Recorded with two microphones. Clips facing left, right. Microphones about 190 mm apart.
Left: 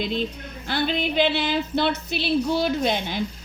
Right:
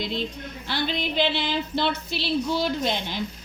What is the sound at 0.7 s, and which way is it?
A woman's voice, 50° left (ahead or behind).